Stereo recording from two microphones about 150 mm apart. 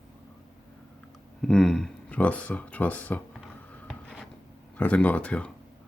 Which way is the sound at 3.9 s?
5° left (ahead or behind).